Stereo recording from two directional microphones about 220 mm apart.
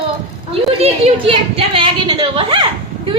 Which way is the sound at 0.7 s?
25° right (ahead or behind).